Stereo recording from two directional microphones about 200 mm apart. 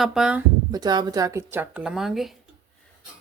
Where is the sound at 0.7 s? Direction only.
20° right (ahead or behind); by 2.3 s centre (ahead or behind).